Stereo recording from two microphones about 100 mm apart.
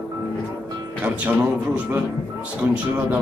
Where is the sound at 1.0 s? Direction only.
20° right (ahead or behind).